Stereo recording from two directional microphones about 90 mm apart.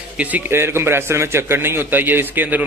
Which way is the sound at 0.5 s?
30° right (ahead or behind).